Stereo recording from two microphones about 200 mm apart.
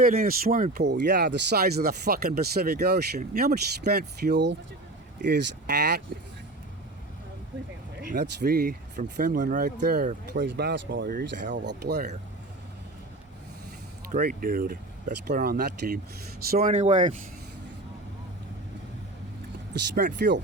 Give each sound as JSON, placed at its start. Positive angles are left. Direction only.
{"t": 0.0, "sound": "speech", "side_deg": -50}
{"t": 8.1, "sound": "speech", "side_deg": -50}
{"t": 9.3, "sound": "speech", "side_deg": -40}
{"t": 10.4, "sound": "speech", "side_deg": -55}
{"t": 14.1, "sound": "speech", "side_deg": -45}
{"t": 20.1, "sound": "speech", "side_deg": -60}